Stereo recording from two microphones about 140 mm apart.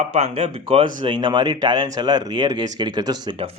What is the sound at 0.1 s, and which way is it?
Speech, 45° right (ahead or behind).